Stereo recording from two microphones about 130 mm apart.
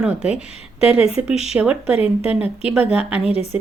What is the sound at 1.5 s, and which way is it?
Speech, 10° right (ahead or behind).